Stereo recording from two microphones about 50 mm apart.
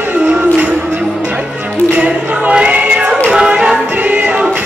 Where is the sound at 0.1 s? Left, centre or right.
Right.